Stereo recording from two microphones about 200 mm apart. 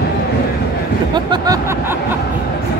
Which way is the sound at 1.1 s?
20° right (ahead or behind).